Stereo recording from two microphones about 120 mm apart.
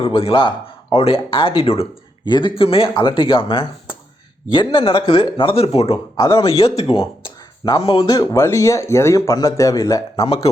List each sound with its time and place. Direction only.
0.0 s speech: 50° left (ahead or behind)
2.2 s speech: 40° left (ahead or behind)
7.6 s speech: 40° left (ahead or behind)
8.0 s speech: 30° left (ahead or behind)
10.2 s speech: 50° left (ahead or behind)